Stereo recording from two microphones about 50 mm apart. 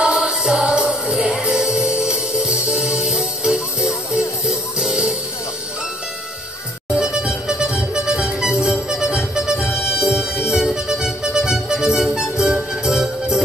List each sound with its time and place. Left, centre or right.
0.0 s music: centre
7.0 s music: centre